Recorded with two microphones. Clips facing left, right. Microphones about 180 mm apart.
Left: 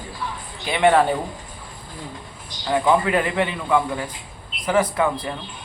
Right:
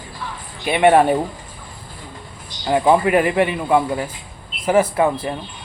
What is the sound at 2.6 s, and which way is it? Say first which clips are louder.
Speech: right 4 dB; 30° right (ahead or behind).